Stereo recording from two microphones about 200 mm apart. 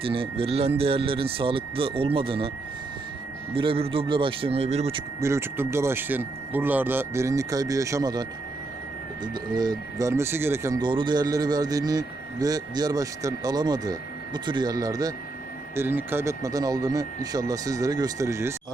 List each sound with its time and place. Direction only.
0.0 s speech: 25° right (ahead or behind)
3.5 s speech: 25° right (ahead or behind)
5.2 s speech: 10° right (ahead or behind)